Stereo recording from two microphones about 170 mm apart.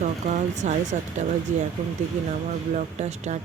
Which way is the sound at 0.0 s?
45° right (ahead or behind).